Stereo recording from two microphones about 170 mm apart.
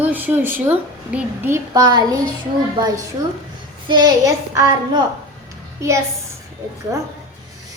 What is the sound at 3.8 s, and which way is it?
A woman's voice, 25° right (ahead or behind).